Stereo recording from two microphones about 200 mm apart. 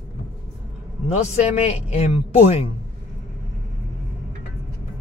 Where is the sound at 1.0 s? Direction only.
35° left (ahead or behind).